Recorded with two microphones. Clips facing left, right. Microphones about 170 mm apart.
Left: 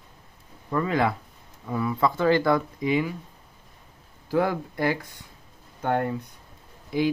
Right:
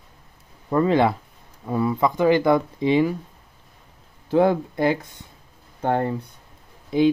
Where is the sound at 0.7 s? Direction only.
30° right (ahead or behind).